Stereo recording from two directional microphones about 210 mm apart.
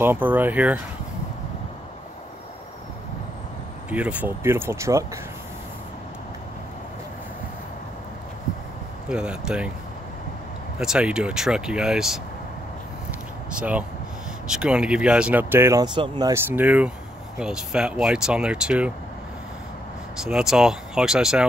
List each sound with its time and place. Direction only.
0.0 s speech: 10° right (ahead or behind)
3.9 s speech: 5° right (ahead or behind)
9.1 s speech: 5° right (ahead or behind)
10.8 s speech: 5° right (ahead or behind)
13.6 s speech: 5° right (ahead or behind)
20.2 s speech: 5° right (ahead or behind)